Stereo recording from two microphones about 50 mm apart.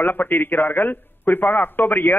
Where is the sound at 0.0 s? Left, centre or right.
Left.